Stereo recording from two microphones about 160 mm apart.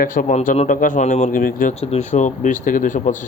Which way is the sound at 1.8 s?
45° left (ahead or behind).